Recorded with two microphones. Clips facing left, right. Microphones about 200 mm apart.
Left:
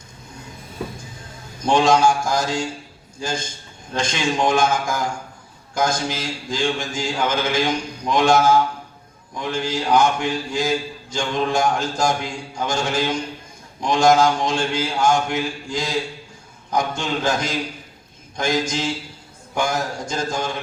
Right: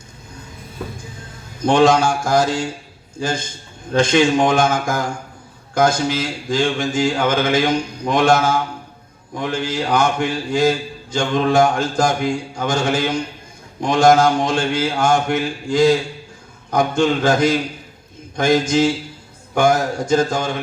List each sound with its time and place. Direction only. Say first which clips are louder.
1.6 s mantra: right 2 dB; 55° right (ahead or behind)